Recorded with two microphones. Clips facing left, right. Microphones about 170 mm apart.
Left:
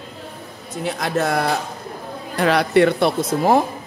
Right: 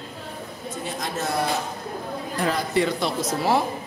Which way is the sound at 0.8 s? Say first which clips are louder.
Left 8 dB; 75° left (ahead or behind).